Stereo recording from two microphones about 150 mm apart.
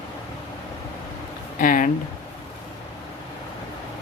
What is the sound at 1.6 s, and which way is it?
Speech, 65° left (ahead or behind).